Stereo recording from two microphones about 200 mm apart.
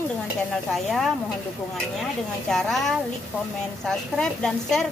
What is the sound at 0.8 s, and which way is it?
Speech, centre (ahead or behind).